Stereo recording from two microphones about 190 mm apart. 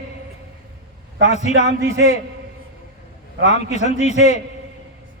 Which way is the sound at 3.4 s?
35° left (ahead or behind).